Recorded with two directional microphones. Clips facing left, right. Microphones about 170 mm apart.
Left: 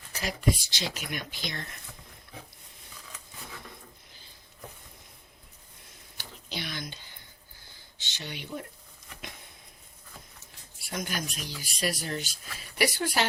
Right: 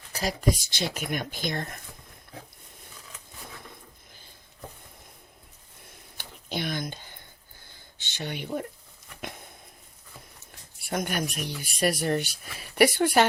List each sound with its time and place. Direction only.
0.1 s speech: 35° right (ahead or behind)
6.1 s a sound: 50° right (ahead or behind)
7.9 s speech: 55° right (ahead or behind)
10.8 s speech: 55° right (ahead or behind)